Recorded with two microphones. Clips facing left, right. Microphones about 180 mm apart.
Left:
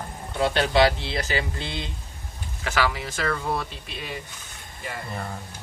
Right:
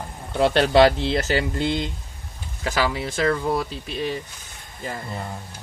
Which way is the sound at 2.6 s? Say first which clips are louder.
Right 2 dB; 30° right (ahead or behind).